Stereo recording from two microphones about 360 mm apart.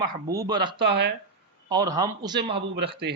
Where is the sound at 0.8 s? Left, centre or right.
Right.